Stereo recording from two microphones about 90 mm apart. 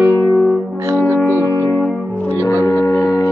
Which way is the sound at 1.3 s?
30° right (ahead or behind).